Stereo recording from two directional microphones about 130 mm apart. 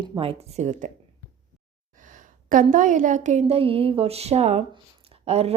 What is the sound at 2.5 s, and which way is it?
A woman's voice, 85° right.